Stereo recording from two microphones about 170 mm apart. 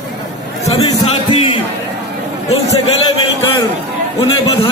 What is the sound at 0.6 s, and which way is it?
Speech, 35° left (ahead or behind).